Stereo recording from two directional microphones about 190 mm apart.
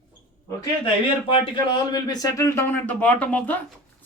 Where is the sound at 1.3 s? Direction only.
25° left (ahead or behind).